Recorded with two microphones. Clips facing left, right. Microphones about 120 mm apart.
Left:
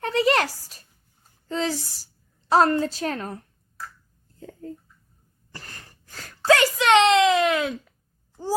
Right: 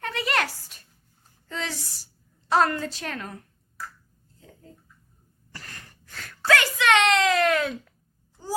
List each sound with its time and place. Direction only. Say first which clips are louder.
0.0 s a sound: left 6 dB; 35° left (ahead or behind)
1.5 s a woman's voice: left 7 dB; 35° left (ahead or behind)
5.5 s whimper: left 1 dB; 35° left (ahead or behind); by 7.7 s 15° left (ahead or behind)
8.4 s babbling: left 6 dB; 40° left (ahead or behind)